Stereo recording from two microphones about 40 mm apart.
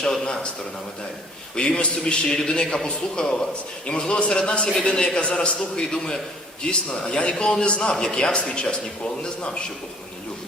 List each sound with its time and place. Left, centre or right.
1.5 s a man's voice: left